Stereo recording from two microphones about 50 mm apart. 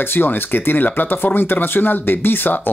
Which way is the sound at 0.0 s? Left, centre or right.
Left.